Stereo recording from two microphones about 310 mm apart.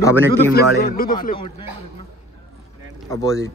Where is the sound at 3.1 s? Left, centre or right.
Centre.